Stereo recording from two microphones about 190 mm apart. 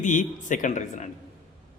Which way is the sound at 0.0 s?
40° left (ahead or behind).